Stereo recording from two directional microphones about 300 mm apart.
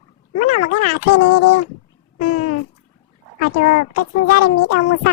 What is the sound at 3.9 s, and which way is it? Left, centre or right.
Speech, left.